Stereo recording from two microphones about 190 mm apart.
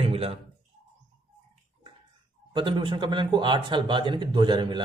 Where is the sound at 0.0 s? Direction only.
30° right (ahead or behind).